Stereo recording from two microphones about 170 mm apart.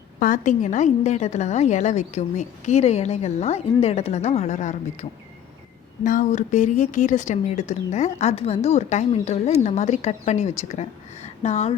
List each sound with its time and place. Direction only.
0.2 s a woman's voice: 50° left (ahead or behind)